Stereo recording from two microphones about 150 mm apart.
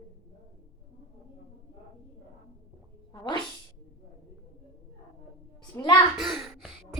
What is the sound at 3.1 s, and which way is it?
Sneeze, 30° left (ahead or behind).